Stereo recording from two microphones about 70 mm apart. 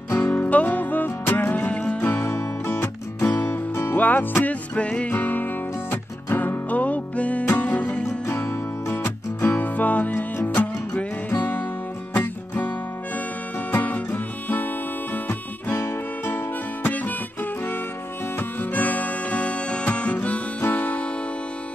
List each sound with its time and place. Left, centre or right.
0.1 s music: left
2.2 s music: left
4.7 s music: centre
8.3 s music: left
18.6 s music: left